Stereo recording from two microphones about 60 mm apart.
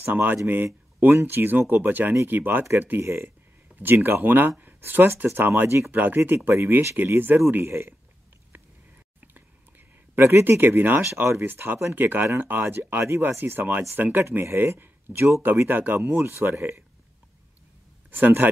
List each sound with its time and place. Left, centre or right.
0.1 s speech: right
7.0 s speech: right
10.1 s speech: right
10.6 s speech: right
15.7 s speech: right
18.1 s speech: right